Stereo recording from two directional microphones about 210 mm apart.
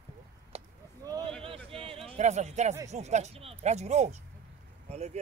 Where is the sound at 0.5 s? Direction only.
30° right (ahead or behind).